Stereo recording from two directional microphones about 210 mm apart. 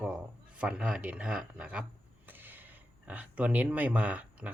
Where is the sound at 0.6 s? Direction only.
5° right (ahead or behind).